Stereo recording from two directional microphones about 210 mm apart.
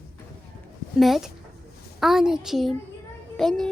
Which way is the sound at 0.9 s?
Centre (ahead or behind).